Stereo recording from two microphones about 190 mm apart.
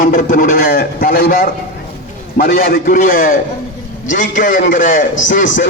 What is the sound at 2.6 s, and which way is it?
A man's voice, 50° left (ahead or behind).